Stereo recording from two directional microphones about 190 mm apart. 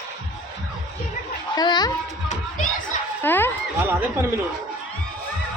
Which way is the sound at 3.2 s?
10° left (ahead or behind).